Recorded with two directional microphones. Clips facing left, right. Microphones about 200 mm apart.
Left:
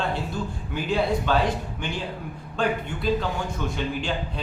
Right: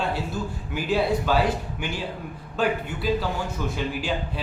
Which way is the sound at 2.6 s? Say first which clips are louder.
Right 1 dB; 5° right (ahead or behind).